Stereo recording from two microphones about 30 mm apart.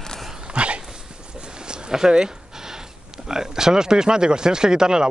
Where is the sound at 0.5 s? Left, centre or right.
Right.